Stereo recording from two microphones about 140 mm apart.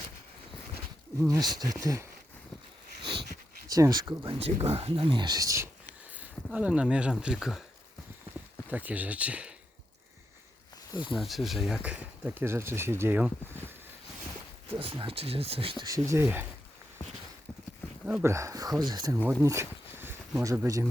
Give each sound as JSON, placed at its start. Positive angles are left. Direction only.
{"t": 1.2, "sound": "speech", "side_deg": -25}
{"t": 3.0, "sound": "dog", "side_deg": -35}
{"t": 3.7, "sound": "speech", "side_deg": -25}
{"t": 6.1, "sound": "speech", "side_deg": -10}
{"t": 8.7, "sound": "speech", "side_deg": -10}
{"t": 11.2, "sound": "speech", "side_deg": 0}
{"t": 14.7, "sound": "speech", "side_deg": -40}
{"t": 15.9, "sound": "speech", "side_deg": -20}
{"t": 18.2, "sound": "speech", "side_deg": -20}
{"t": 19.2, "sound": "a sound", "side_deg": -15}
{"t": 20.4, "sound": "speech", "side_deg": -25}